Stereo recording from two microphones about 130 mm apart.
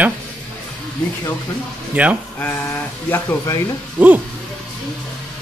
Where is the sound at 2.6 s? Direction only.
20° left (ahead or behind).